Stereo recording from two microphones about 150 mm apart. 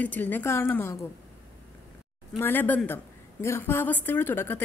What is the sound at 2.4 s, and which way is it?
A woman's voice, 15° left (ahead or behind).